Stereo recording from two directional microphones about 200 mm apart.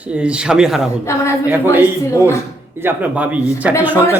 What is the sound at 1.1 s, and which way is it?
Speech, 15° left (ahead or behind).